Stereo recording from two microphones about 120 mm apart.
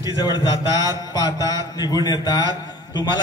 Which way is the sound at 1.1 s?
35° left (ahead or behind).